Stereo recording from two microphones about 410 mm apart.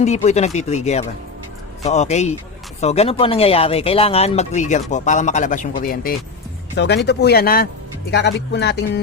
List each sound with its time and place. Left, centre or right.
0.0 s speech: centre